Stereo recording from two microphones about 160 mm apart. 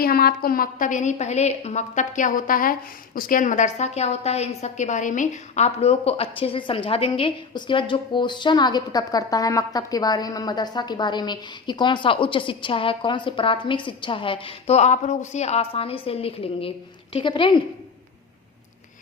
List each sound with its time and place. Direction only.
0.0 s a woman's voice: 70° left (ahead or behind); by 17.6 s 30° left (ahead or behind)